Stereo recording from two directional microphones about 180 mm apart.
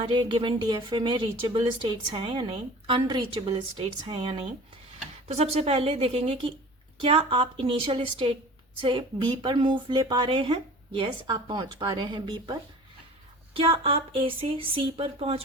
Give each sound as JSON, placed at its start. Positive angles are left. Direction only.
{"t": 0.0, "sound": "speech", "side_deg": -25}
{"t": 13.5, "sound": "speech", "side_deg": -30}